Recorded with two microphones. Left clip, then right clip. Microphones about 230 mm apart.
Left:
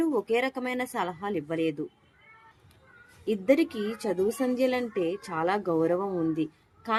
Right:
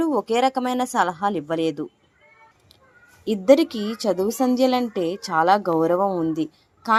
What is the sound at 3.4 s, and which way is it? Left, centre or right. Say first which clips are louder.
Speech: right 9 dB; right.